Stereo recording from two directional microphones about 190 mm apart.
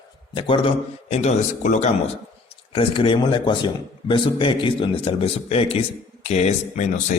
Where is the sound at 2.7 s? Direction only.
30° left (ahead or behind).